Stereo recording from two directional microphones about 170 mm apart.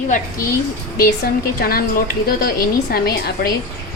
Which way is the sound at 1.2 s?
60° left (ahead or behind).